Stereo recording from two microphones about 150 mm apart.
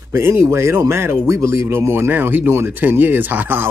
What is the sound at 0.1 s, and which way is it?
Speech, 20° right (ahead or behind).